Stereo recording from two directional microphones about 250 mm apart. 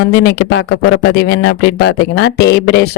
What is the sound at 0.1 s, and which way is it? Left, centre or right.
Speech, left.